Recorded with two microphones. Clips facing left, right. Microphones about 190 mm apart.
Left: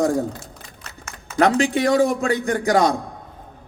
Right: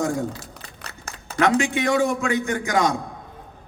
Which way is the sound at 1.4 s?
40° left (ahead or behind).